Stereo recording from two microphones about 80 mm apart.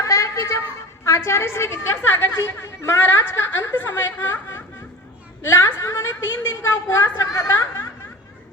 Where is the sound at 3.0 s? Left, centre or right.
Left.